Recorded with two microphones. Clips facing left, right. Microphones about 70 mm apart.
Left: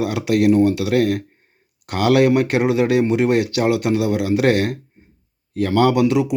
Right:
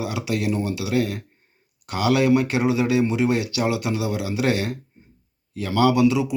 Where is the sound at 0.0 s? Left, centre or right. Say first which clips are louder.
Left 8 dB; left.